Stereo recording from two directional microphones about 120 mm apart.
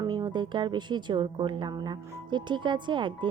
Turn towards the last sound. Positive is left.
turn(degrees=-40)  # may be behind; listen again after turning